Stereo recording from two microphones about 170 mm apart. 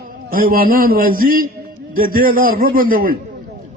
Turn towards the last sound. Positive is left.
turn(degrees=-55)  # may be behind; listen again after turning